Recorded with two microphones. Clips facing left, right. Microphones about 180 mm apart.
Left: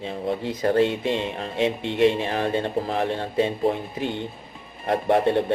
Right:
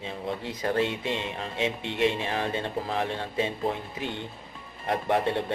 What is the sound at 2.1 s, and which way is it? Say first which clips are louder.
Speech: left 4 dB; 40° left (ahead or behind).